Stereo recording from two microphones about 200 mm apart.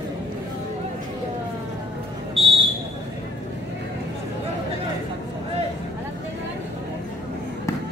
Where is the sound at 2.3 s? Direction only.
30° right (ahead or behind).